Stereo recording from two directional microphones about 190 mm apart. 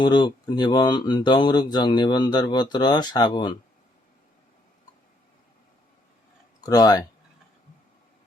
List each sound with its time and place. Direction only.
0.0 s speech: 25° left (ahead or behind)
6.6 s speech: 20° left (ahead or behind)